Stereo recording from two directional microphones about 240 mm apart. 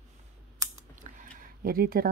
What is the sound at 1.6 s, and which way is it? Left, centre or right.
Speech, right.